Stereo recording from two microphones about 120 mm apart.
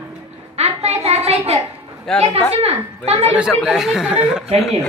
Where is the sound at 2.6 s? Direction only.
60° right (ahead or behind).